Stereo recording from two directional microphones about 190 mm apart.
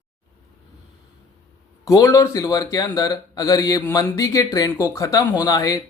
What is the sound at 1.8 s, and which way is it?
Speech, 15° left (ahead or behind).